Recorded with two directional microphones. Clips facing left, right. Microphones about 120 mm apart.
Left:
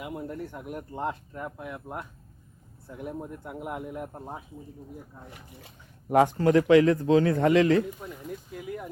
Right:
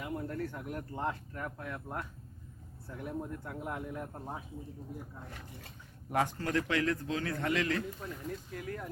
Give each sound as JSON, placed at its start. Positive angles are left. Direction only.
{"t": 0.0, "sound": "speech", "side_deg": 15}
{"t": 6.4, "sound": "speech", "side_deg": 20}
{"t": 7.9, "sound": "speech", "side_deg": 10}